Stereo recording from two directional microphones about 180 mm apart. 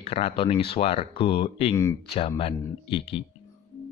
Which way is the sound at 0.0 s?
35° left (ahead or behind).